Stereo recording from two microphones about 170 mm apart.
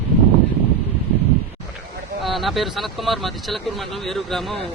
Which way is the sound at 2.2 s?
Centre (ahead or behind).